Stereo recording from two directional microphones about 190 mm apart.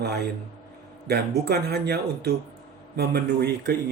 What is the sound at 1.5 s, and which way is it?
Speech, 60° right (ahead or behind).